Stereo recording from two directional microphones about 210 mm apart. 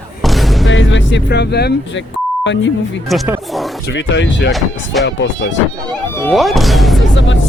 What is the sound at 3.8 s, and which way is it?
Speech, 55° left (ahead or behind).